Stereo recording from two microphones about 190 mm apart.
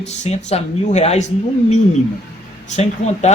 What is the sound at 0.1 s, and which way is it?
Speech, 35° left (ahead or behind).